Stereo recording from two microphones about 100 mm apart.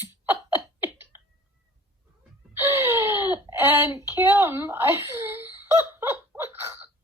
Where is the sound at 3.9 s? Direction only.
25° right (ahead or behind).